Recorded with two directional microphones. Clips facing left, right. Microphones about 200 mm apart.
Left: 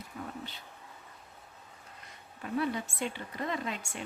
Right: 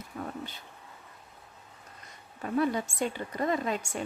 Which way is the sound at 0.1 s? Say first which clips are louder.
Right 4 dB; 55° right (ahead or behind).